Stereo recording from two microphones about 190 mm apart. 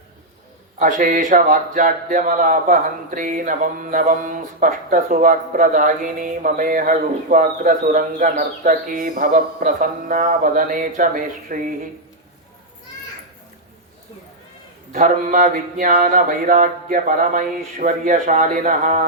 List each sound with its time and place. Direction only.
0.8 s speech: 45° right (ahead or behind)
14.9 s speech: 45° right (ahead or behind)